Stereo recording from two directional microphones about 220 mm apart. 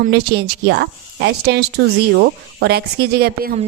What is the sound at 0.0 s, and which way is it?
Speech, 50° right (ahead or behind).